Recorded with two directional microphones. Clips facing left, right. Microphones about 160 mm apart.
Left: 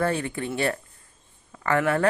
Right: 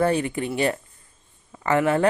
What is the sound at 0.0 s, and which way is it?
A woman's voice, 15° right (ahead or behind).